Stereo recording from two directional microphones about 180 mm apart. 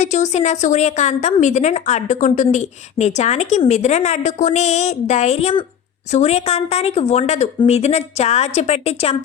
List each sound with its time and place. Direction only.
0.0 s a woman's voice: 40° left (ahead or behind)